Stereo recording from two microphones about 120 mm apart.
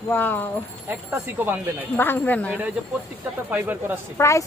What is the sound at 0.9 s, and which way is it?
Speech, 15° right (ahead or behind).